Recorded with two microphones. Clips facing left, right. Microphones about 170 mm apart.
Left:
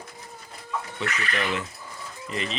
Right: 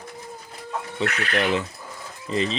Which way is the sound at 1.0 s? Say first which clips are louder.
Right 6 dB; 70° right (ahead or behind).